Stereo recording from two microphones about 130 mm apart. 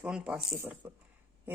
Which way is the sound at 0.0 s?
5° right (ahead or behind).